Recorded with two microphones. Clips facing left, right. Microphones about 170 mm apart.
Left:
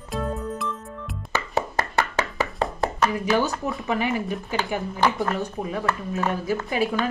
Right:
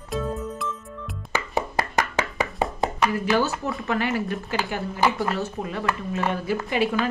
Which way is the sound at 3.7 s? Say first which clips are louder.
Even; centre (ahead or behind).